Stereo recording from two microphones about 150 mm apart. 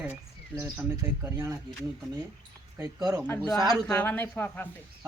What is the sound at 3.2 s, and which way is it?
Speech, 10° left (ahead or behind).